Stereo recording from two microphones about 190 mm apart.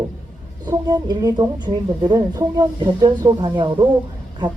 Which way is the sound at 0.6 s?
20° right (ahead or behind).